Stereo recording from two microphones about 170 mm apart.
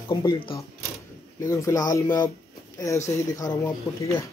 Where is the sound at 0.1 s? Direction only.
25° left (ahead or behind).